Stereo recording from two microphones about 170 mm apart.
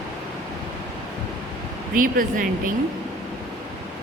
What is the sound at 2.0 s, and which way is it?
Speech, 55° right (ahead or behind).